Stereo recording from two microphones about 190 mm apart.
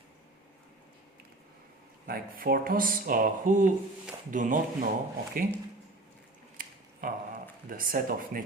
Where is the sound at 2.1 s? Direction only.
50° right (ahead or behind).